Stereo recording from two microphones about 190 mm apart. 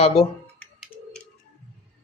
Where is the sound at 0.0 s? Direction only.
30° left (ahead or behind).